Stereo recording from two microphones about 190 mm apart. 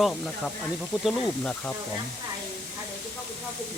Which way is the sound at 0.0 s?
Centre (ahead or behind).